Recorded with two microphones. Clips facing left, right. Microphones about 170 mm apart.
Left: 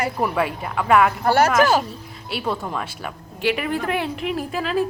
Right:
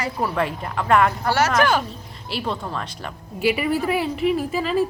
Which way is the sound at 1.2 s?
55° left (ahead or behind).